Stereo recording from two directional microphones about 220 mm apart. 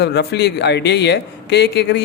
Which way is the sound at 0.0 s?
50° left (ahead or behind).